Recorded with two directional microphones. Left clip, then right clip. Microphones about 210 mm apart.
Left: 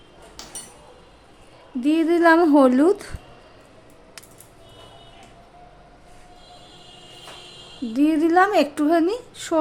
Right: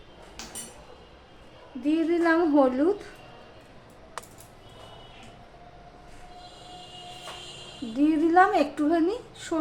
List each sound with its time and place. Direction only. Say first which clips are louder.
1.8 s a woman's voice: left 7 dB; 55° left (ahead or behind)
7.9 s speech: left 3 dB; 40° left (ahead or behind)